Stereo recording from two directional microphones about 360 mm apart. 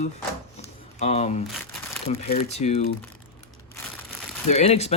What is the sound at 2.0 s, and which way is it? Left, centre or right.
Speech, centre.